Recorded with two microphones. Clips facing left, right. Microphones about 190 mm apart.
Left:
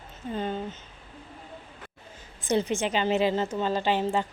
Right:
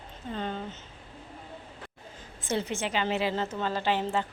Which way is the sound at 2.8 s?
20° left (ahead or behind).